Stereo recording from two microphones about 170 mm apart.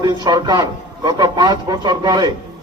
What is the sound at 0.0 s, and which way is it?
A man's voice, 20° right (ahead or behind).